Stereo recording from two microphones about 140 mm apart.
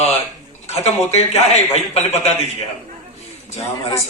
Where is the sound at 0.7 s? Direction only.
50° left (ahead or behind).